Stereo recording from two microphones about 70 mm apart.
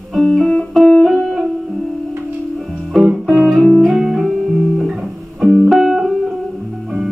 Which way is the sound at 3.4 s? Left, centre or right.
Centre.